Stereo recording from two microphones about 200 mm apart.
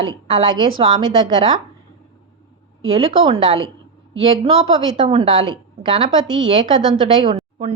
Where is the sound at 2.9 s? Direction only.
30° right (ahead or behind).